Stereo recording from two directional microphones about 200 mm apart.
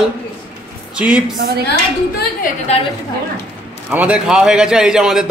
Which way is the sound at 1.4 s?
50° right (ahead or behind).